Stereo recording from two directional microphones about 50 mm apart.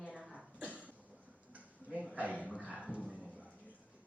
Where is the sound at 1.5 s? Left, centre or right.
Right.